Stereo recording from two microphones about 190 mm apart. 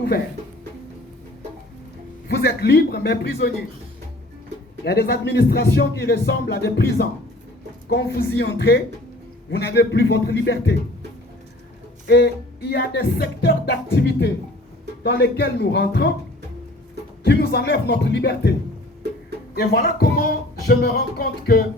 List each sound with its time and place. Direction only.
2.2 s speech: 55° left (ahead or behind)
4.9 s speech: 60° left (ahead or behind)
12.0 s speech: 60° left (ahead or behind)
17.2 s speech: 60° left (ahead or behind)
19.5 s music: 50° left (ahead or behind)